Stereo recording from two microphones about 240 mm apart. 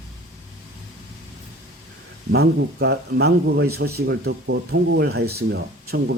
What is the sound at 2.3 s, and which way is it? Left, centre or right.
Speech, right.